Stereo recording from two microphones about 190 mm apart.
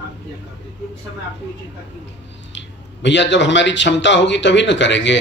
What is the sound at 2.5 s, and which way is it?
Speech, 70° left (ahead or behind).